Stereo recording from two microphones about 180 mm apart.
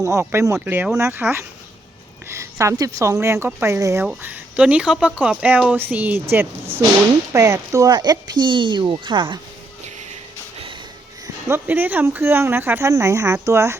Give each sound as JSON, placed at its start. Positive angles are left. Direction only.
{"t": 0.0, "sound": "speech", "side_deg": -15}
{"t": 11.4, "sound": "speech", "side_deg": -10}